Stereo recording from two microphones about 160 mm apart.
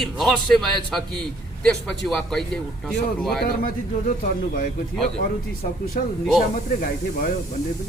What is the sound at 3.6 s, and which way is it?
A man's voice, 60° left (ahead or behind).